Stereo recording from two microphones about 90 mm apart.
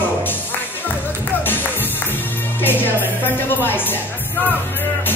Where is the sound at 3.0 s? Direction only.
25° left (ahead or behind).